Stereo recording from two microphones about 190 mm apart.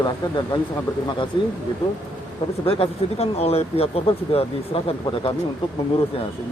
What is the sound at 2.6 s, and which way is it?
Speech, 30° left (ahead or behind).